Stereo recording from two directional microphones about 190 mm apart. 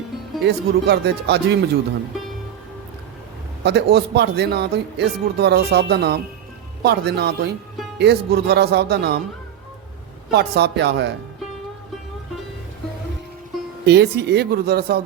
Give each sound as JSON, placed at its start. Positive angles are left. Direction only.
{"t": 0.4, "sound": "speech", "side_deg": -60}
{"t": 3.6, "sound": "speech", "side_deg": -60}
{"t": 10.3, "sound": "speech", "side_deg": -60}
{"t": 13.8, "sound": "speech", "side_deg": -60}